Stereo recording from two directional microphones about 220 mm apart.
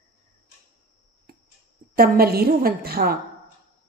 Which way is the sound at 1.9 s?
45° right (ahead or behind).